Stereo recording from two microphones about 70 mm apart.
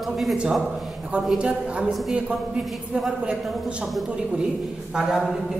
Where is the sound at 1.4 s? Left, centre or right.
Centre.